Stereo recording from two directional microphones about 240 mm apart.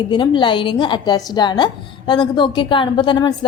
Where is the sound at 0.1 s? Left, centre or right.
Centre.